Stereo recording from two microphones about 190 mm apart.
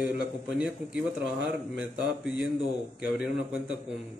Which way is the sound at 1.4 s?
5° right (ahead or behind).